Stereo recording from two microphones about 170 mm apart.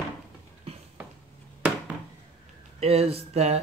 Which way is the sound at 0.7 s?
35° right (ahead or behind).